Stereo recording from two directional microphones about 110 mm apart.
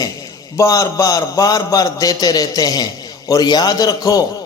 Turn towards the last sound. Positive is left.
turn(degrees=35)  # may be behind; listen again after turning